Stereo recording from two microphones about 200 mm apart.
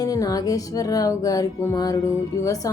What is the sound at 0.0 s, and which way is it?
Music, 20° left (ahead or behind).